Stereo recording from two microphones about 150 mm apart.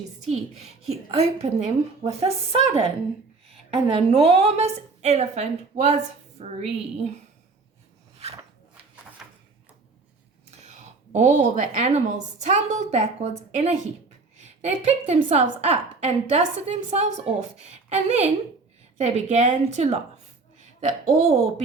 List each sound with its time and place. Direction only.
0.3 s a woman's voice: 45° right (ahead or behind)
3.8 s a woman's voice: 40° right (ahead or behind)
5.7 s speech: 25° right (ahead or behind)
6.4 s a woman's voice: 45° right (ahead or behind)
8.2 s a sound: 45° right (ahead or behind)
10.6 s a woman's voice: 50° right (ahead or behind)